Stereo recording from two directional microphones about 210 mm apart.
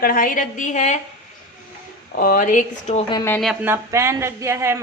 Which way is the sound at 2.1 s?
45° left (ahead or behind).